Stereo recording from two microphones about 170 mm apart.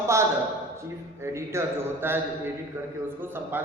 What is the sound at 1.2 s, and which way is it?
A man's voice, 15° right (ahead or behind).